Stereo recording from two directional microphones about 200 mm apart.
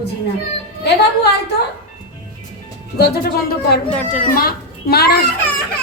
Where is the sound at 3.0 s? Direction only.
50° left (ahead or behind).